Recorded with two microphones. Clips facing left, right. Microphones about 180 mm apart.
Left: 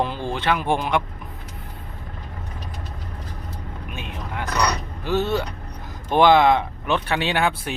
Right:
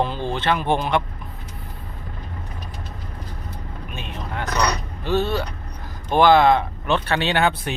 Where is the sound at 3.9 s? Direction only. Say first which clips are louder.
Right 1 dB; 15° left (ahead or behind).